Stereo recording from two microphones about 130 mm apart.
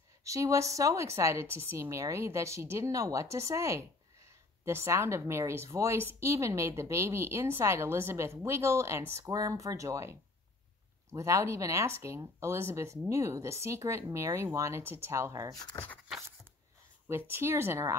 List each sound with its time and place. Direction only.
0.2 s a woman's voice: 25° right (ahead or behind)
15.5 s speech: 25° left (ahead or behind)
17.1 s a woman's voice: 20° right (ahead or behind)